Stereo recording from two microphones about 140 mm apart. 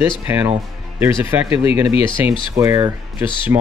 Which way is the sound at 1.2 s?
15° right (ahead or behind).